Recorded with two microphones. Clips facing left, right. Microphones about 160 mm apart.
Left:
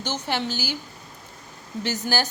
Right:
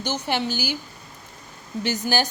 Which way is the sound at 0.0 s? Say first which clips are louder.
Right 2 dB; 15° right (ahead or behind).